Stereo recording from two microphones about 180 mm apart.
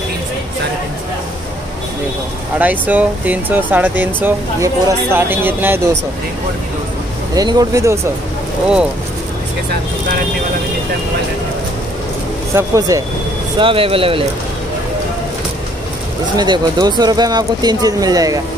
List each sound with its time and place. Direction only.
2.6 s speech: 10° right (ahead or behind)
7.3 s speech: 20° right (ahead or behind)
12.5 s speech: 20° right (ahead or behind)
13.6 s speech: 30° right (ahead or behind)
16.3 s speech: 25° right (ahead or behind)